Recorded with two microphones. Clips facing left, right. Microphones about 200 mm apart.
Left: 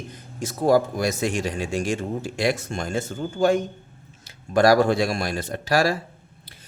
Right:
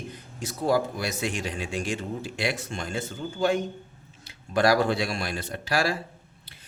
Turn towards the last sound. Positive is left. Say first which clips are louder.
# left 5 dB
turn(degrees=45)  # may be behind; listen again after turning